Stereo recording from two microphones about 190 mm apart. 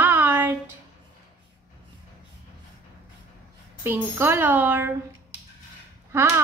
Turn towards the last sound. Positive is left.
turn(degrees=-15)  # may be behind; listen again after turning